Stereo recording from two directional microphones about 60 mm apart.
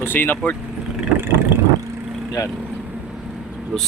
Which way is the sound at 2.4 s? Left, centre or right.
Left.